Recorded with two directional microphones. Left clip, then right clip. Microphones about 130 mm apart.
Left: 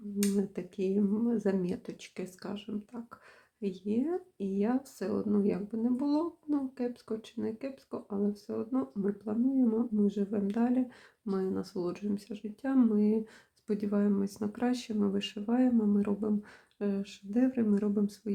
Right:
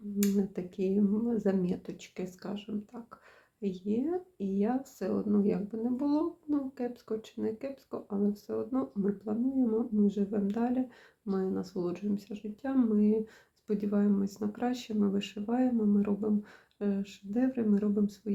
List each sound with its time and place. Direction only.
0.2 s a woman's voice: 20° left (ahead or behind)